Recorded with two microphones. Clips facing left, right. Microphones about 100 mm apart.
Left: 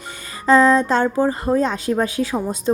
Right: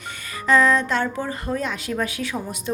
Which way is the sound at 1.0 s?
35° left (ahead or behind).